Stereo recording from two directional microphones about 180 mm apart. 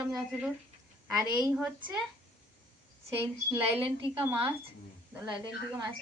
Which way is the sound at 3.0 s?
15° right (ahead or behind).